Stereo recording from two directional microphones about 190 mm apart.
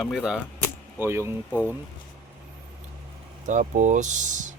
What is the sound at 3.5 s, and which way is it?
Speech, 40° right (ahead or behind).